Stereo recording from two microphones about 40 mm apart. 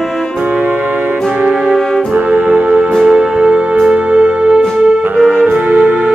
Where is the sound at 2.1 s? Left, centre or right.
Right.